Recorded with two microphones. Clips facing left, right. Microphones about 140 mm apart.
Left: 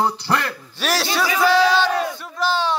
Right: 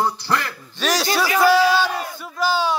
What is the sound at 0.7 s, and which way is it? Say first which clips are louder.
A man's voice: right 2 dB; 5° left (ahead or behind).